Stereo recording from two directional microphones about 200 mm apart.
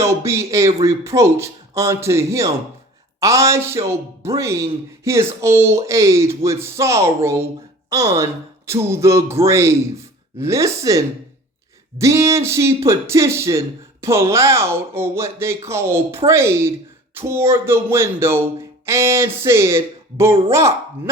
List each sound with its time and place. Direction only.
0.0 s speech: 15° right (ahead or behind)